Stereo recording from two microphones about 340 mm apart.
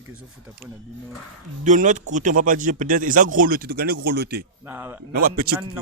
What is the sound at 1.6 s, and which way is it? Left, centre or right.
Speech, right.